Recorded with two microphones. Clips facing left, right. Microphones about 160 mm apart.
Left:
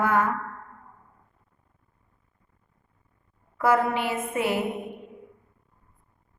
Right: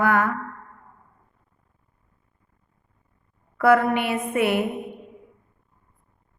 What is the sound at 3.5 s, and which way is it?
A woman's voice, 65° right (ahead or behind).